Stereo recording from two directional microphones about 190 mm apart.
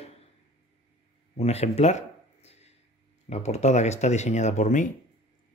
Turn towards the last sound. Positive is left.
turn(degrees=40)  # may be behind; listen again after turning